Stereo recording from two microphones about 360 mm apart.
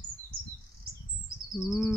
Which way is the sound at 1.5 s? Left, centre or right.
Centre.